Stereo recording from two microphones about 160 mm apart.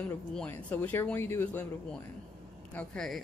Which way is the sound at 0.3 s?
5° left (ahead or behind).